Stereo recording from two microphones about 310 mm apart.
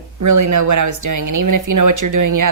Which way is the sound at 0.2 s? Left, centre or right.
Right.